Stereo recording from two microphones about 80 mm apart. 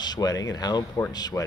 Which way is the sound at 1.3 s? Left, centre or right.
Left.